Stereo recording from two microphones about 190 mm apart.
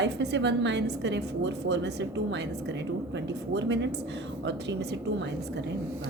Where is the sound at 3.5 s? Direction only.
65° right (ahead or behind).